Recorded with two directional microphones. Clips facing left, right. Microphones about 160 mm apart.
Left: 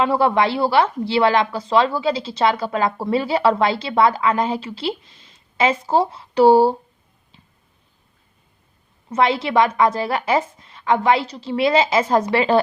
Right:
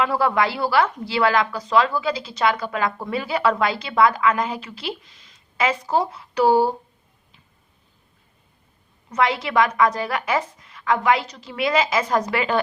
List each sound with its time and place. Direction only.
0.0 s a woman's voice: 25° left (ahead or behind)
9.0 s a woman's voice: 30° left (ahead or behind)